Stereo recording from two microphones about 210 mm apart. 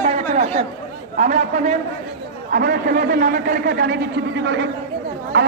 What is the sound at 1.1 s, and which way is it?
Speech, 35° right (ahead or behind).